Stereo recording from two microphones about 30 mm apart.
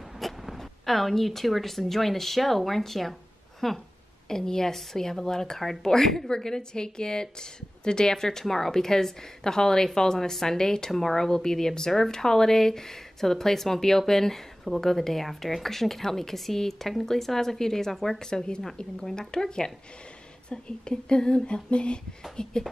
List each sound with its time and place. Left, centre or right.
0.2 s speech: centre
4.3 s speech: centre
21.6 s speech: left
22.4 s speech: left